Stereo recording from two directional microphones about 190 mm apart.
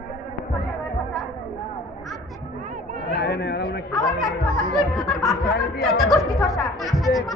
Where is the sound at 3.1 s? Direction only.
65° left (ahead or behind).